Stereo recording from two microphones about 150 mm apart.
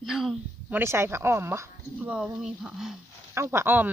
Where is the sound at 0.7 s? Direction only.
15° right (ahead or behind).